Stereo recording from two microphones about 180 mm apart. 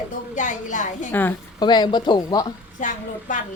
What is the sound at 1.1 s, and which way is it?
Speech, 10° left (ahead or behind).